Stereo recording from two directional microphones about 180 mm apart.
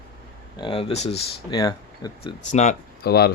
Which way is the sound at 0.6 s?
30° left (ahead or behind).